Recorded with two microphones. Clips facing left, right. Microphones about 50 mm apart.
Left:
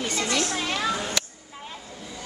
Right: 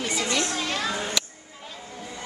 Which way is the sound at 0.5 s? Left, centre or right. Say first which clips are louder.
Left 1 dB; centre.